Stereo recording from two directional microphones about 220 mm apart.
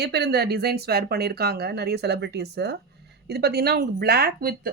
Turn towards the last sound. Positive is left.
turn(degrees=-40)  # may be behind; listen again after turning